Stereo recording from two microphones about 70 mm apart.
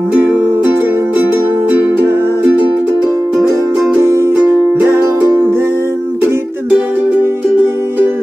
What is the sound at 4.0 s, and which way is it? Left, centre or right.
Music, right.